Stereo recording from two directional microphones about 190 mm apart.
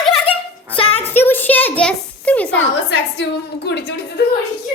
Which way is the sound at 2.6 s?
70° left (ahead or behind).